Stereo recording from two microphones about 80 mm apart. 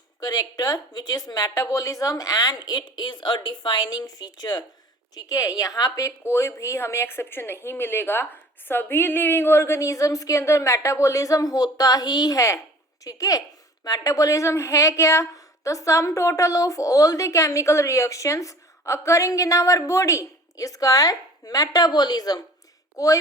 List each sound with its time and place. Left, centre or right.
0.2 s speech: left
5.1 s a woman's voice: left